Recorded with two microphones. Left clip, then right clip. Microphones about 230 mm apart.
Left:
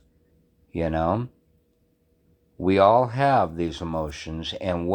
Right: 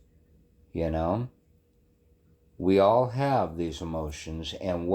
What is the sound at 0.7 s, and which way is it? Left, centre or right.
Speech, left.